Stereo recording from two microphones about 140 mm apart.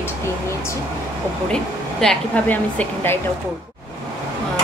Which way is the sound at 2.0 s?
5° left (ahead or behind).